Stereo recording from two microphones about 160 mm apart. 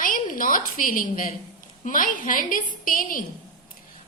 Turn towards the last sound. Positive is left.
turn(degrees=60)  # may be behind; listen again after turning